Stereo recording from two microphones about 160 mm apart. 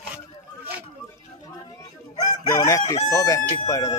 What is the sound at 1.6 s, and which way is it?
Crowing, 25° left (ahead or behind).